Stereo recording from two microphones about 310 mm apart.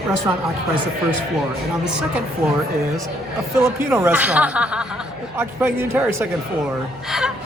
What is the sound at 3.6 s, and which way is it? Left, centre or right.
A woman's voice, centre.